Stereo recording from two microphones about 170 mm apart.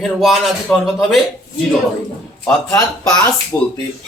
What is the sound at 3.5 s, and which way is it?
Speech, 10° left (ahead or behind).